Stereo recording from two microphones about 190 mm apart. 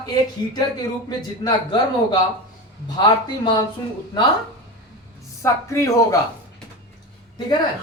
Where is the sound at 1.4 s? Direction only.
25° left (ahead or behind).